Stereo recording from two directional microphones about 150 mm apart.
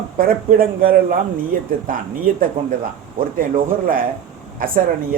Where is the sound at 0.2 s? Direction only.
70° right (ahead or behind).